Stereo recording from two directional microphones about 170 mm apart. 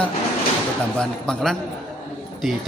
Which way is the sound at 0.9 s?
5° left (ahead or behind).